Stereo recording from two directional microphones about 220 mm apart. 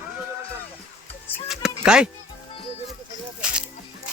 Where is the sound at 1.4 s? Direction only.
5° right (ahead or behind).